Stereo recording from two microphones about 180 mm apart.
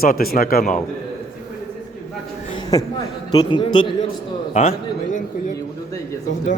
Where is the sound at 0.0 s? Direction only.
55° left (ahead or behind).